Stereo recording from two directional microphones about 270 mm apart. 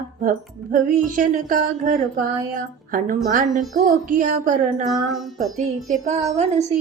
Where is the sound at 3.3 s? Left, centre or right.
Right.